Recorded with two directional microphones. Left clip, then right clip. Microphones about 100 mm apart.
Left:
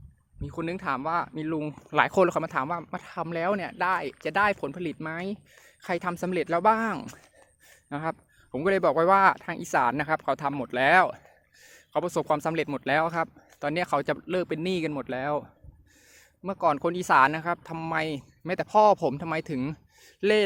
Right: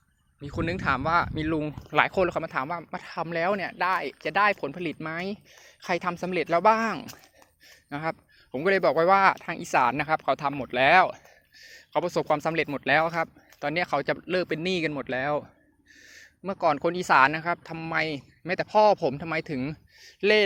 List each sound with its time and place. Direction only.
0.4 s speech: centre (ahead or behind)
1.6 s speech: 30° left (ahead or behind)
2.1 s speech: 55° left (ahead or behind)
2.5 s speech: 30° left (ahead or behind)
3.0 s speech: 20° left (ahead or behind)
6.1 s speech: 50° left (ahead or behind)
6.4 s speech: 30° left (ahead or behind)
10.9 s speech: 45° left (ahead or behind); by 13.1 s 25° left (ahead or behind)
13.6 s speech: 40° left (ahead or behind)
14.2 s speech: 20° left (ahead or behind)